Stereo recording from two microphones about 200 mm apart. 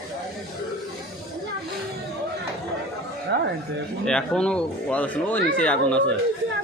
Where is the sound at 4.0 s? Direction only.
5° left (ahead or behind).